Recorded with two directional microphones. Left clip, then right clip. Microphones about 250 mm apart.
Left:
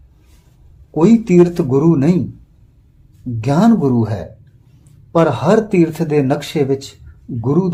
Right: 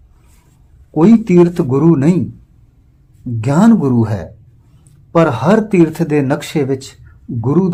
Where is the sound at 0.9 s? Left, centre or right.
Centre.